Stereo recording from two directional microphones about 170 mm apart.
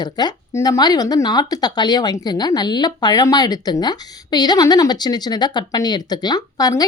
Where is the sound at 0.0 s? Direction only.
25° left (ahead or behind).